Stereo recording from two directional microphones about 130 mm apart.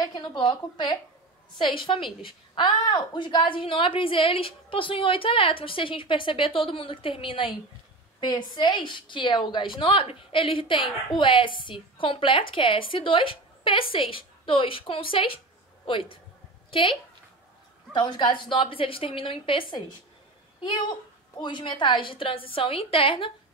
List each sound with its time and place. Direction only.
0.0 s a woman's voice: 35° left (ahead or behind)
21.4 s a woman's voice: 35° left (ahead or behind)